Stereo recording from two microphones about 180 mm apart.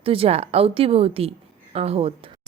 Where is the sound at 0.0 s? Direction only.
30° right (ahead or behind).